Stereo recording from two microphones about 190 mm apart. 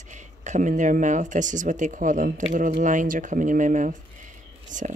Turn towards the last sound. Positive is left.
turn(degrees=-40)  # may be behind; listen again after turning